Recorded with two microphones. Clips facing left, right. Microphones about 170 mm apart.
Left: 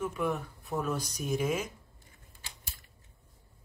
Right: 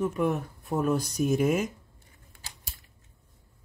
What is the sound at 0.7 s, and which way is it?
Speech, 50° right (ahead or behind).